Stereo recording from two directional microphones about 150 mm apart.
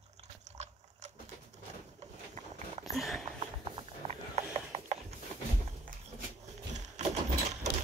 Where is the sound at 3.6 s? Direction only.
40° right (ahead or behind).